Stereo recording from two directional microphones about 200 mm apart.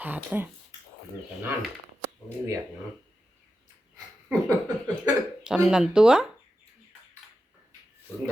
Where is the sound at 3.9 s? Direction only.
20° right (ahead or behind).